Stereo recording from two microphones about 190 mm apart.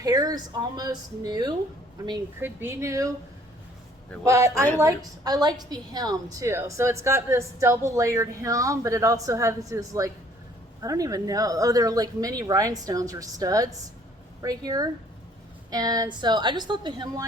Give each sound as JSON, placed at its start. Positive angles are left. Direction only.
{"t": 0.0, "sound": "a woman's voice", "side_deg": -20}
{"t": 4.2, "sound": "a woman's voice", "side_deg": -15}